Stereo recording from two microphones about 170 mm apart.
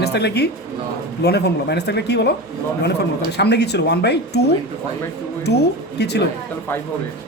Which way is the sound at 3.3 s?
80° left.